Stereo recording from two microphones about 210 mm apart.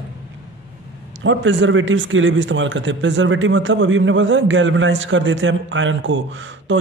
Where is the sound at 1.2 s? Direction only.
65° right (ahead or behind).